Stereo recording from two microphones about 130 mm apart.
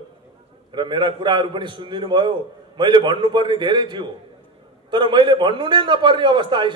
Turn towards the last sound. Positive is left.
turn(degrees=-35)  # may be behind; listen again after turning